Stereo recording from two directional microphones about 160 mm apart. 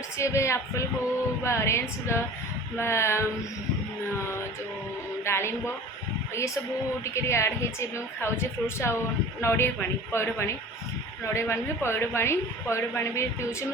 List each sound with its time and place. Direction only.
0.2 s a woman's voice: 20° left (ahead or behind)
5.2 s a woman's voice: 15° left (ahead or behind)
7.0 s a woman's voice: 15° left (ahead or behind)